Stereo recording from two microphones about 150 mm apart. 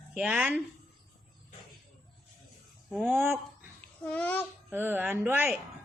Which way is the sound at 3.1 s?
15° right (ahead or behind).